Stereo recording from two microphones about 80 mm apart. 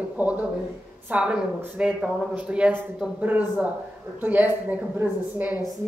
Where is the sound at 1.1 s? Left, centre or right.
Centre.